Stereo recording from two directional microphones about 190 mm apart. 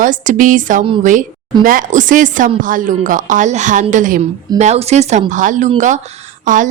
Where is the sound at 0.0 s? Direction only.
45° right (ahead or behind).